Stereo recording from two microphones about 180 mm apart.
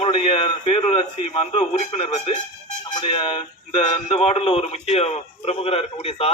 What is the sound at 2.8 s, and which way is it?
A man's voice, 25° left (ahead or behind).